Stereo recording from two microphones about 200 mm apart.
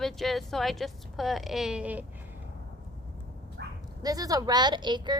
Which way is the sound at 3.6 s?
55° right (ahead or behind).